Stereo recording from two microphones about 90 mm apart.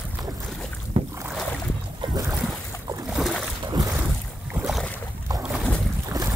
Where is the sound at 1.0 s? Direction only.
90° right.